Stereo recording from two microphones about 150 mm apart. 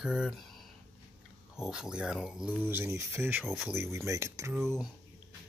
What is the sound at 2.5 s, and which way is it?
Speech, 15° right (ahead or behind).